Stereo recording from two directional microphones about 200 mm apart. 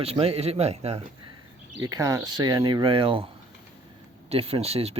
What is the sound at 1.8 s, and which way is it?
Speech, 20° right (ahead or behind).